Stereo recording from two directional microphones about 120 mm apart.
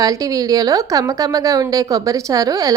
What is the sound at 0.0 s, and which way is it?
A woman's voice, 30° right (ahead or behind).